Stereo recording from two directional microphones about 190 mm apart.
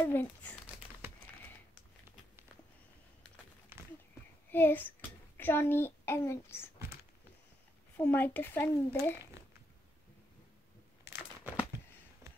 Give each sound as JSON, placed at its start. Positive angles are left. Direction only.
{"t": 0.0, "sound": "a child's voice", "side_deg": 10}
{"t": 4.5, "sound": "child singing", "side_deg": 10}
{"t": 5.4, "sound": "a child's voice", "side_deg": 10}
{"t": 8.0, "sound": "a child's voice", "side_deg": 10}
{"t": 11.1, "sound": "crumpling", "side_deg": -10}